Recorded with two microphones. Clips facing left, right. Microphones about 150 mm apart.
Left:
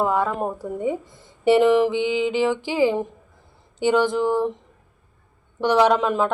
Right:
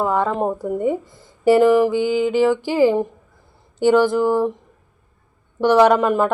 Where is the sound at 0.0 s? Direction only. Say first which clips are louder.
Right 2 dB; 5° left (ahead or behind).